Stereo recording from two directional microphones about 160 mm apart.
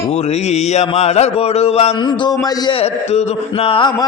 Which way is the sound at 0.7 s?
40° left (ahead or behind).